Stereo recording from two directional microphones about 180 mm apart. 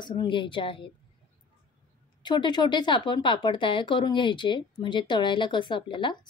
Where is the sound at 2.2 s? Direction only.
25° left (ahead or behind).